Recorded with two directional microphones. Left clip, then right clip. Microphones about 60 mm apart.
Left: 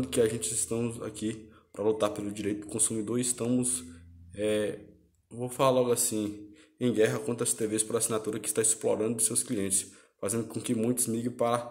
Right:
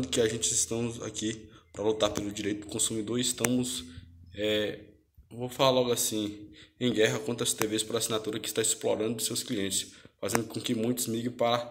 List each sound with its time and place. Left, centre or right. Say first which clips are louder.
0.0 s a man's voice: even; left